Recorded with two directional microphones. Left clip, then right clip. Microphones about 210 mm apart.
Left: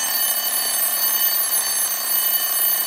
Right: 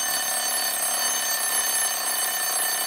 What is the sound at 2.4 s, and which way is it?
Alarm clock, 10° right (ahead or behind).